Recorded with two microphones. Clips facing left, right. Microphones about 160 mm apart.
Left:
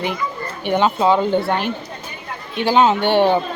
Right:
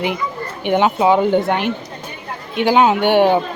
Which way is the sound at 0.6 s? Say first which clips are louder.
Right 2 dB; 15° right (ahead or behind).